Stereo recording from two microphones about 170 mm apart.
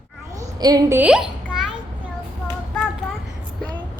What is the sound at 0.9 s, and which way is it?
Speech, 5° right (ahead or behind).